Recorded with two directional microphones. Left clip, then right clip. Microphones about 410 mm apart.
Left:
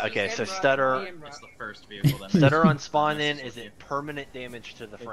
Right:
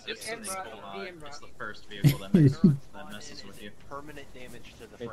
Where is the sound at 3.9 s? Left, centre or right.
Left.